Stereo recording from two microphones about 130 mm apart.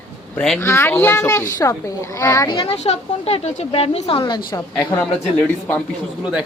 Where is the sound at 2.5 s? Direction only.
45° left (ahead or behind).